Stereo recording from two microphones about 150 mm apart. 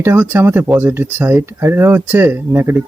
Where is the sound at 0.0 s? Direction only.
15° right (ahead or behind).